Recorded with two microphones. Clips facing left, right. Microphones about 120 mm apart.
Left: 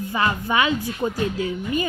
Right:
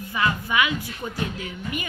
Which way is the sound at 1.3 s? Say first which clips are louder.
Left 7 dB; 30° left (ahead or behind).